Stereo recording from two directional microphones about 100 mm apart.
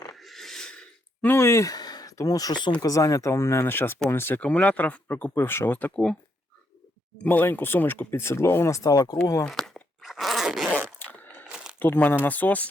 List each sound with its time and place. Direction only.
0.1 s a sound: centre (ahead or behind)
1.3 s speech: 30° left (ahead or behind); by 2.7 s 45° left (ahead or behind)
2.8 s speech: 35° left (ahead or behind)
7.3 s speech: 20° left (ahead or behind)
9.5 s zipper: 5° left (ahead or behind)
11.0 s a sound: 20° left (ahead or behind)
11.8 s speech: 20° left (ahead or behind)